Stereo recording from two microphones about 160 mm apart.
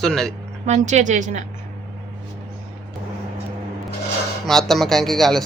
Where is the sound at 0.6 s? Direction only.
45° right (ahead or behind).